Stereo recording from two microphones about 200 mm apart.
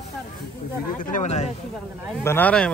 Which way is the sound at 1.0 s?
40° left (ahead or behind).